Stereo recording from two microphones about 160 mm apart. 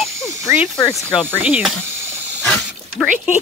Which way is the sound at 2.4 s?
10° left (ahead or behind).